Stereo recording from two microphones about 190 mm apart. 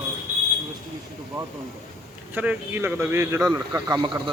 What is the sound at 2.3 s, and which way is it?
Speech, 10° right (ahead or behind).